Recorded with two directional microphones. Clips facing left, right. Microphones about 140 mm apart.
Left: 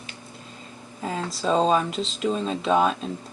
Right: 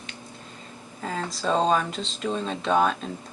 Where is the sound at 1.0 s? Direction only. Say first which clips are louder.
Left 2 dB; 5° left (ahead or behind).